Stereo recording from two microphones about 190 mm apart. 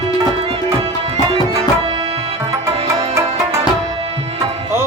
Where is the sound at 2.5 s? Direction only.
15° right (ahead or behind).